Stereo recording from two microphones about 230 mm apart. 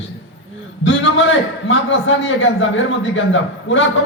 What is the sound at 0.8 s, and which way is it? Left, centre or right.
A man's voice, left.